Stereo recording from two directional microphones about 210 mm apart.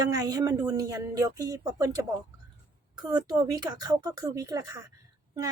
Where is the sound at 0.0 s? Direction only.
15° right (ahead or behind).